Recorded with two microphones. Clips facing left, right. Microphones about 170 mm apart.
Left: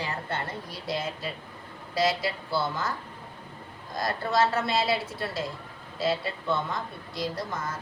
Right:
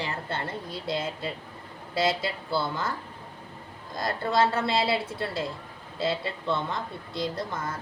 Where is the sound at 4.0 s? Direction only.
25° right (ahead or behind).